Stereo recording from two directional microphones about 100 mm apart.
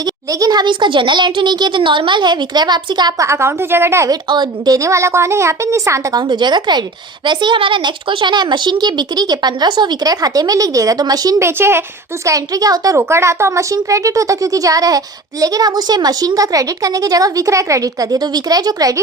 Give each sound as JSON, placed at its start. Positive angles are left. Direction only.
{"t": 0.3, "sound": "speech", "side_deg": -40}
{"t": 3.2, "sound": "a woman's voice", "side_deg": -25}
{"t": 4.1, "sound": "a woman's voice", "side_deg": -45}
{"t": 6.2, "sound": "speech", "side_deg": -45}
{"t": 11.3, "sound": "a woman's voice", "side_deg": -25}
{"t": 12.2, "sound": "speech", "side_deg": -35}
{"t": 13.0, "sound": "a woman's voice", "side_deg": -25}